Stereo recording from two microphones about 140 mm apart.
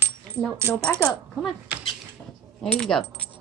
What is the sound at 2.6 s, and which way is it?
Speech, 5° left (ahead or behind).